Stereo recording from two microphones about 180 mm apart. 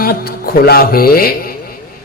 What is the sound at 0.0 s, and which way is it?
A man's voice, 55° left (ahead or behind).